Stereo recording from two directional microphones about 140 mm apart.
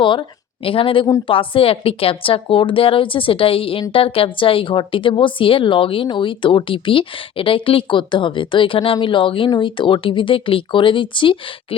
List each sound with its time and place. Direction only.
0.0 s a woman's voice: 35° left (ahead or behind)